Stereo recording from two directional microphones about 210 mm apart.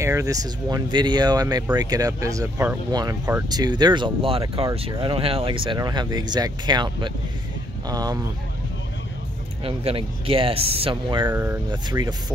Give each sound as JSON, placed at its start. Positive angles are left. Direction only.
{"t": 0.0, "sound": "speech", "side_deg": -15}
{"t": 9.7, "sound": "speech", "side_deg": -25}
{"t": 11.2, "sound": "speech", "side_deg": -10}